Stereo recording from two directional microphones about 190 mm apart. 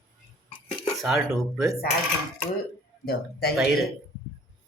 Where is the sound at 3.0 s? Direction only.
55° left (ahead or behind).